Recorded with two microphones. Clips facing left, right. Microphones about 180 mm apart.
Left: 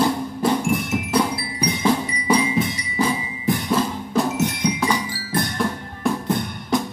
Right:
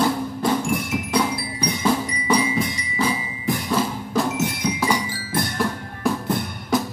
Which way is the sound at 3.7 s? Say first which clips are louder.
Left 1 dB; centre (ahead or behind).